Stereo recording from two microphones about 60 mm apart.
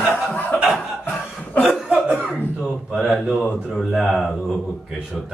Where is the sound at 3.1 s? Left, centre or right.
Centre.